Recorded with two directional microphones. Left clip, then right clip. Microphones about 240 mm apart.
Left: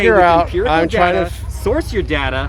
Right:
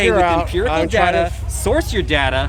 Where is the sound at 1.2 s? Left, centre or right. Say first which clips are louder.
Right 1 dB; centre.